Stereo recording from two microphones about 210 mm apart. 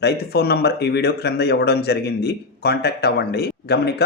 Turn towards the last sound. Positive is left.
turn(degrees=50)  # may be behind; listen again after turning